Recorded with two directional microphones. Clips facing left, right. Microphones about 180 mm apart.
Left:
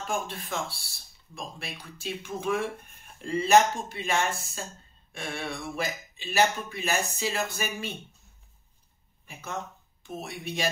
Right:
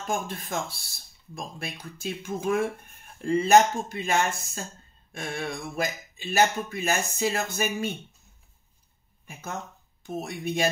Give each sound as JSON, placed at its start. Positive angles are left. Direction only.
{"t": 0.0, "sound": "speech", "side_deg": -45}
{"t": 10.0, "sound": "speech", "side_deg": -45}